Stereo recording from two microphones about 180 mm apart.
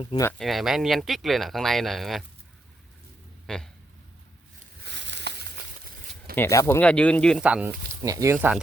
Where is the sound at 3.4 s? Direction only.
5° left (ahead or behind).